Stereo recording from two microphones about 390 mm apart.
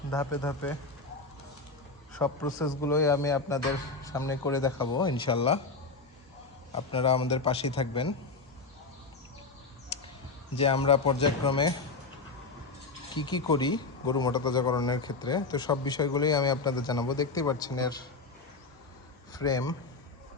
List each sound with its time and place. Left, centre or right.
0.1 s a man's voice: centre
2.1 s a man's voice: centre
6.7 s a man's voice: centre
10.5 s a man's voice: centre
13.1 s a man's voice: centre
19.3 s a man's voice: centre